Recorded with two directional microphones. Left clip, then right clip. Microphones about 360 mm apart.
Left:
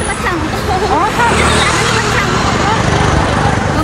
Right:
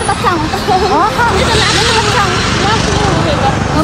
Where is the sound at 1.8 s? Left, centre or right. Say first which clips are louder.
Right 2 dB; centre.